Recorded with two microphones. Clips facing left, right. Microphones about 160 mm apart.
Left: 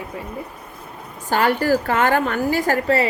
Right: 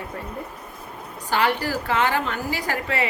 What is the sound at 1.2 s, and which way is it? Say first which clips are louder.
A woman's voice: left 5 dB; 45° left (ahead or behind).